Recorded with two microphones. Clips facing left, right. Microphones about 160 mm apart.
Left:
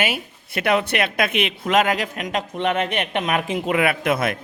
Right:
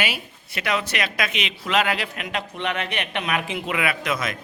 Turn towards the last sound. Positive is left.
turn(degrees=55)  # may be behind; listen again after turning